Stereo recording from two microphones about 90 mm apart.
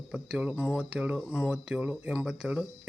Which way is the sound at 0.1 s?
10° right (ahead or behind).